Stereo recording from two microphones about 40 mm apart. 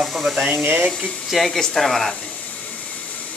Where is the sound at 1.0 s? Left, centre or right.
Centre.